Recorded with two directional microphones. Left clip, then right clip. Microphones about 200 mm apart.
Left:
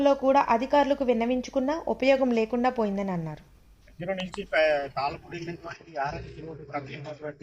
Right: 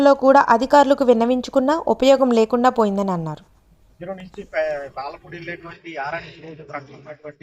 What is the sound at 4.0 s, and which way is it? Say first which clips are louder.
Speech: even; 10° left (ahead or behind).